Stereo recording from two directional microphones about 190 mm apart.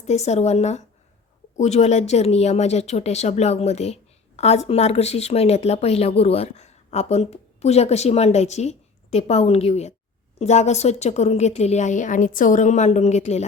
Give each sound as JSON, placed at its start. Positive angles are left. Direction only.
{"t": 0.0, "sound": "a woman's voice", "side_deg": 35}